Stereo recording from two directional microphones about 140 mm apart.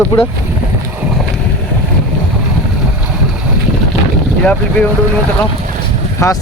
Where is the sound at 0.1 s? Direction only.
30° left (ahead or behind).